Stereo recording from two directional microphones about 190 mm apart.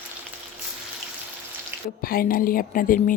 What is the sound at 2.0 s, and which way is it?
A woman's voice, 50° left (ahead or behind).